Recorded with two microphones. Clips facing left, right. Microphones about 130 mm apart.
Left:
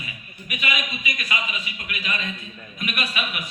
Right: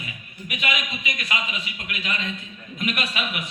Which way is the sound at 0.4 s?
65° right (ahead or behind).